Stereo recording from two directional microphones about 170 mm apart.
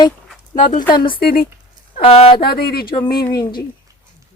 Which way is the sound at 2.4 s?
65° left (ahead or behind).